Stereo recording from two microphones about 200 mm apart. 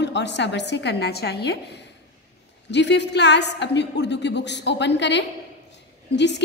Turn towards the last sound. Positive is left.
turn(degrees=60)  # may be behind; listen again after turning